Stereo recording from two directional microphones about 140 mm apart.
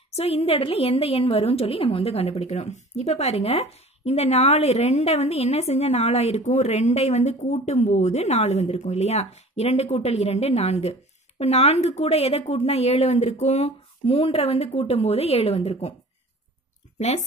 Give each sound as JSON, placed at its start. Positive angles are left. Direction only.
{"t": 0.1, "sound": "a woman's voice", "side_deg": 45}